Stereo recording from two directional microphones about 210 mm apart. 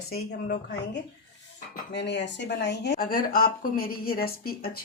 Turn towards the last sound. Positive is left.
turn(degrees=45)  # may be behind; listen again after turning